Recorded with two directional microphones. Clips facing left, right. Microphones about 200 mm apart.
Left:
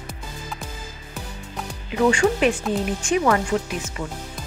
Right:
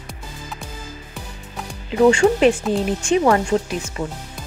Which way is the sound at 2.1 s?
30° right (ahead or behind).